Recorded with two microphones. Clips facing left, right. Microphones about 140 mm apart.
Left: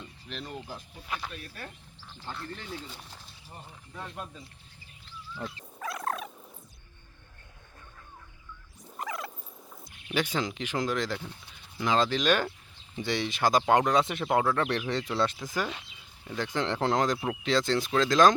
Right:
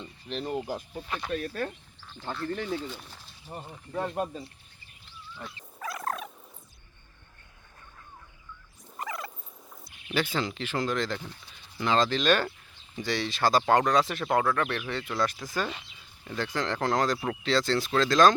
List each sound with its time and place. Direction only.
0.0 s a sound: 35° right (ahead or behind)
0.5 s speech: 45° right (ahead or behind)
1.0 s speech: 5° left (ahead or behind)
1.3 s speech: 60° right (ahead or behind)
3.5 s speech: 60° right (ahead or behind)
5.8 s purr: centre (ahead or behind)
9.0 s a sound: centre (ahead or behind)
10.2 s speech: 15° left (ahead or behind)
16.2 s speech: 10° left (ahead or behind)
16.5 s speech: 20° left (ahead or behind)